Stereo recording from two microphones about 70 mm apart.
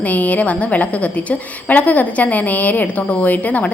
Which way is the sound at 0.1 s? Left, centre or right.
Left.